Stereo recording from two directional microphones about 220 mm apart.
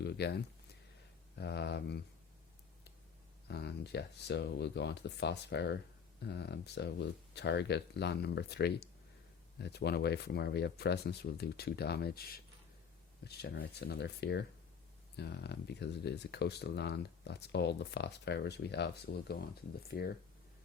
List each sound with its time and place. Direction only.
0.0 s speech: 50° left (ahead or behind)
3.5 s speech: 50° left (ahead or behind)